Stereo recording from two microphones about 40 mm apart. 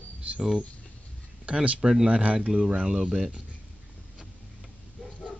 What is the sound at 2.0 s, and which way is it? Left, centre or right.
Speech, right.